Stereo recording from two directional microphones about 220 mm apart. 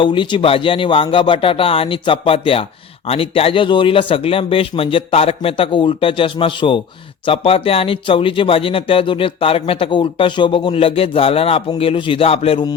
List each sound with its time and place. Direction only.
0.0 s speech: 20° left (ahead or behind)